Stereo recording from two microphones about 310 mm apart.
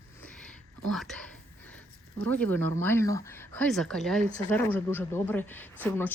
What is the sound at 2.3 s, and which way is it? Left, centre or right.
A woman's voice, centre.